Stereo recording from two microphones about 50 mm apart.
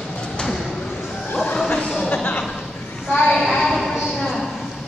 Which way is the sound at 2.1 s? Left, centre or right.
Left.